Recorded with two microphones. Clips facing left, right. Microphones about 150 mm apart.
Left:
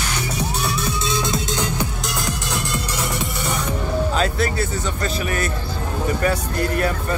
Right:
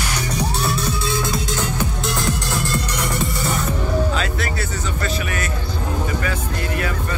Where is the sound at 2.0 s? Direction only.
Centre (ahead or behind).